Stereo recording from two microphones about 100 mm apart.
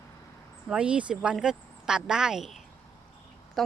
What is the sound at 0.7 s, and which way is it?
Speech, 10° right (ahead or behind).